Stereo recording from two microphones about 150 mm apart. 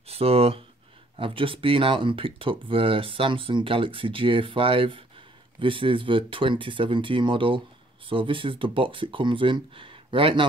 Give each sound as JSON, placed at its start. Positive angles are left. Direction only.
{"t": 0.1, "sound": "speech", "side_deg": -40}